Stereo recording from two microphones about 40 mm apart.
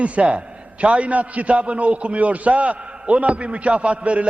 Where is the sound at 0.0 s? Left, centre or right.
Right.